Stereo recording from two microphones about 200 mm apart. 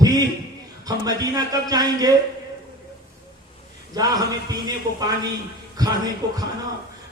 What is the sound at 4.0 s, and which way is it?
Speech, 20° right (ahead or behind).